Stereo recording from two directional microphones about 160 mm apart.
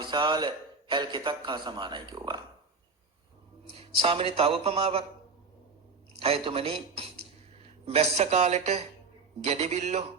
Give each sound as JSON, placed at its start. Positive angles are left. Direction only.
{"t": 0.0, "sound": "a man's voice", "side_deg": -30}
{"t": 3.7, "sound": "a man's voice", "side_deg": -35}
{"t": 6.1, "sound": "a man's voice", "side_deg": -35}